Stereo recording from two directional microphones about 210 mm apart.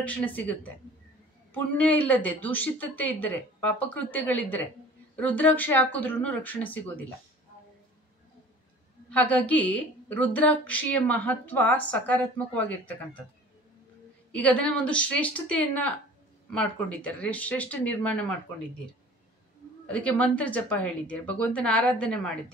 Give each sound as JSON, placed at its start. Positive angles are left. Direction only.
{"t": 0.0, "sound": "a woman's voice", "side_deg": 5}
{"t": 9.1, "sound": "a woman's voice", "side_deg": 5}
{"t": 14.3, "sound": "a woman's voice", "side_deg": 5}
{"t": 19.9, "sound": "a woman's voice", "side_deg": 5}